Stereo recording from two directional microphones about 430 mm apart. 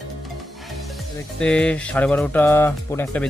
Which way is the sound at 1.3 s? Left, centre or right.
Centre.